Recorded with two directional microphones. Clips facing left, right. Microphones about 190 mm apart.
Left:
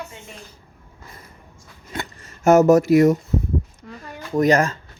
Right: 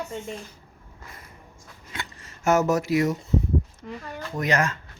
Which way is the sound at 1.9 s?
45° left (ahead or behind).